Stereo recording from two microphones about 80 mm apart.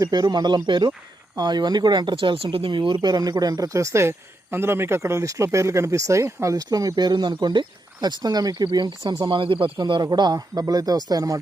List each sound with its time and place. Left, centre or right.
0.0 s speech: right
6.6 s speech: right
8.0 s speech: right
8.6 s speech: right
9.3 s speech: right